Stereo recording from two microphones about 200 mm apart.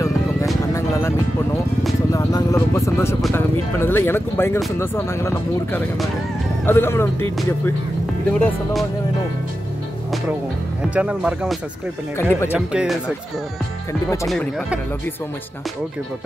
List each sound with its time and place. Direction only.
2.1 s vehicle: 15° left (ahead or behind)
3.3 s speech: 10° left (ahead or behind)
11.0 s speech: 5° right (ahead or behind)
12.2 s speech: 10° left (ahead or behind)
12.5 s speech: centre (ahead or behind)
14.2 s speech: centre (ahead or behind)